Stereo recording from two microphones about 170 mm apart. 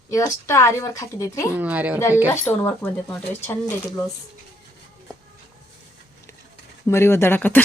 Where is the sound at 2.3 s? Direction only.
10° left (ahead or behind).